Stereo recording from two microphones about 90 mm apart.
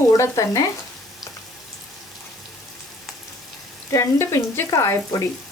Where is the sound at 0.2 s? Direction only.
35° left (ahead or behind).